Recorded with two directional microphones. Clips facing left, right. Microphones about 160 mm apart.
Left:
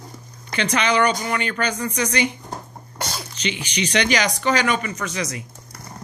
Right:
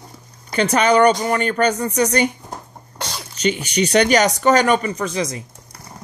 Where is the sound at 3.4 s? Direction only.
45° right (ahead or behind).